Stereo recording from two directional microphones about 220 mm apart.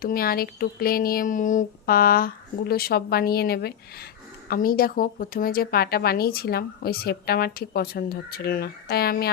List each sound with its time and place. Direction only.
0.0 s a woman's voice: 40° left (ahead or behind)